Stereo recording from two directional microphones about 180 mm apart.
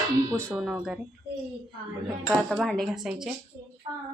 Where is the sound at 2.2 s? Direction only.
Centre (ahead or behind).